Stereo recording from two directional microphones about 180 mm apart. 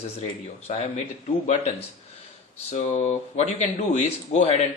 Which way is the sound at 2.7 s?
40° left (ahead or behind).